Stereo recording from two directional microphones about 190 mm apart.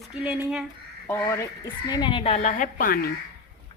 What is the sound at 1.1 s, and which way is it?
Speech, 15° left (ahead or behind).